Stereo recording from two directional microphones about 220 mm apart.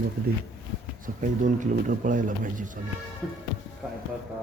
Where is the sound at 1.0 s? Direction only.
35° right (ahead or behind).